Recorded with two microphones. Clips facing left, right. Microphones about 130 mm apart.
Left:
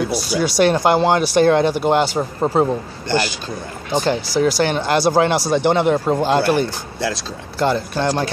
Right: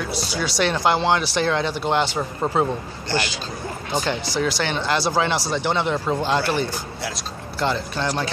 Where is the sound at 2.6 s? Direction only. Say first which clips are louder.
Left 4 dB; 40° left (ahead or behind).